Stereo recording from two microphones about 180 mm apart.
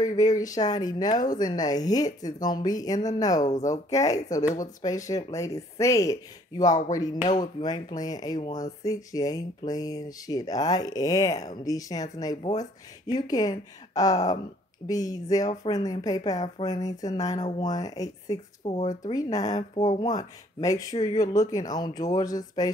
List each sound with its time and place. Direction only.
0.4 s speech: 20° left (ahead or behind)